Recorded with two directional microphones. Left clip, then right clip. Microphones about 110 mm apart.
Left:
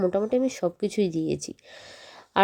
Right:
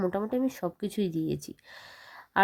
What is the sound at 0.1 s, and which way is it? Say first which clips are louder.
Speech: left 6 dB; 10° left (ahead or behind).